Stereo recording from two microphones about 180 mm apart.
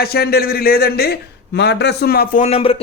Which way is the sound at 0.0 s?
60° left (ahead or behind).